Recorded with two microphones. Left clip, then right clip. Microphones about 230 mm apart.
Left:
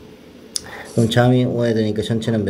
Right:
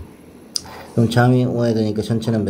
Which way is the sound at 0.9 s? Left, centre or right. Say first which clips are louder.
Left 1 dB; centre.